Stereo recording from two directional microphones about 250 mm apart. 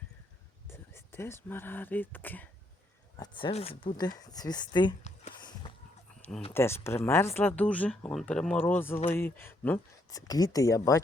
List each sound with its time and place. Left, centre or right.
0.7 s speech: centre
3.2 s speech: centre
4.3 s a sound: centre
6.5 s speech: centre